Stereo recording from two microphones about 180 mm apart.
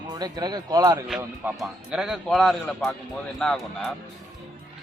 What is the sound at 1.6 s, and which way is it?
Speech, 5° right (ahead or behind).